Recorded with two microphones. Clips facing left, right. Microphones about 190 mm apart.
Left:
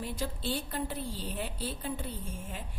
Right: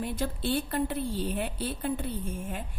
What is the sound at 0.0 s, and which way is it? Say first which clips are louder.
A woman's voice: right 4 dB; 60° right (ahead or behind).